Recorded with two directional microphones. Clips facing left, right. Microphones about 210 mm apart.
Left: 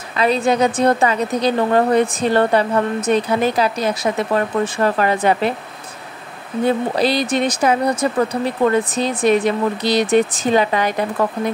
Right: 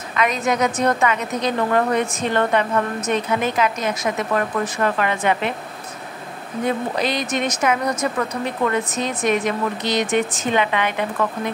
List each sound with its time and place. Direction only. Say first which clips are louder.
0.2 s a woman's voice: left 4 dB; 30° left (ahead or behind)
6.6 s a woman's voice: left 5 dB; 35° left (ahead or behind)